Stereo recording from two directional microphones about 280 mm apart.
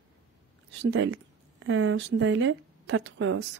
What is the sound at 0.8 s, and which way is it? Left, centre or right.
A woman's voice, right.